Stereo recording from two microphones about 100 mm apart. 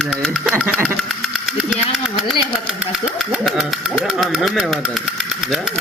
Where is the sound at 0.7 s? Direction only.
20° right (ahead or behind).